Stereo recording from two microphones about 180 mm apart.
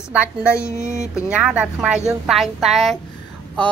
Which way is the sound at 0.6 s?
15° left (ahead or behind).